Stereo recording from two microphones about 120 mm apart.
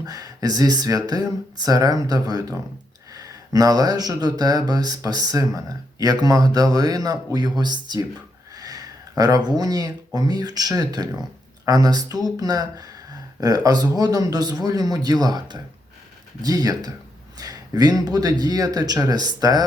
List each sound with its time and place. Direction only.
0.0 s speech: 30° right (ahead or behind)
8.5 s a sound: 30° right (ahead or behind)
10.2 s speech: 35° right (ahead or behind)